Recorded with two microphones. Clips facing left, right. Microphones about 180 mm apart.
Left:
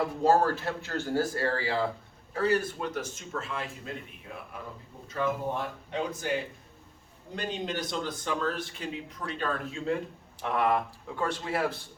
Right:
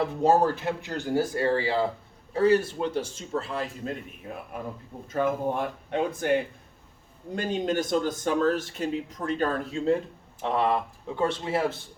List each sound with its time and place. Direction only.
0.2 s speech: 20° right (ahead or behind); by 3.9 s 35° right (ahead or behind)
5.0 s speech: 50° right (ahead or behind)
7.3 s speech: 45° right (ahead or behind); by 11.8 s 25° right (ahead or behind)